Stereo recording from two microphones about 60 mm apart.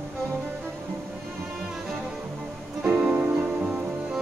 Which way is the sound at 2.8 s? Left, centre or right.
Right.